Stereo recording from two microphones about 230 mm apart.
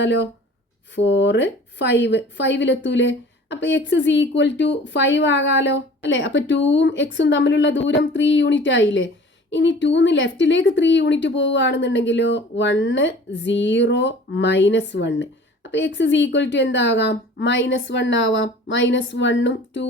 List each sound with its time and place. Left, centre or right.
0.0 s a woman's voice: left